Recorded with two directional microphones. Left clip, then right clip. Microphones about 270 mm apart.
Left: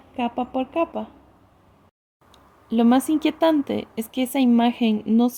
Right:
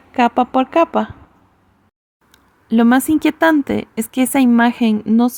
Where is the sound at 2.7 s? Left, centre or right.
Right.